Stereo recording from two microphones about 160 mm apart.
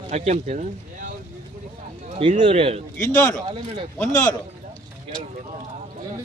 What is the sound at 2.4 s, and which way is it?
Speech, 35° right (ahead or behind).